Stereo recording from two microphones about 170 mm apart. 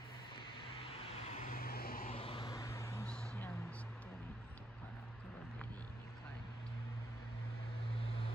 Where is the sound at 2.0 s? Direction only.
35° left (ahead or behind); by 3.1 s 15° left (ahead or behind).